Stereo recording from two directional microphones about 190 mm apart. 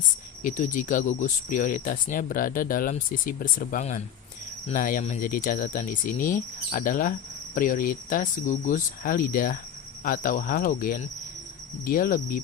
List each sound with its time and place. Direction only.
0.4 s speech: 45° left (ahead or behind)